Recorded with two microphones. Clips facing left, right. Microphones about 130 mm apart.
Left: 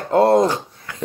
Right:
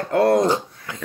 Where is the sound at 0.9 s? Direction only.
20° right (ahead or behind).